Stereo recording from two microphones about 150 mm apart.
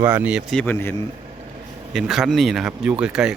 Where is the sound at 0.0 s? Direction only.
10° right (ahead or behind).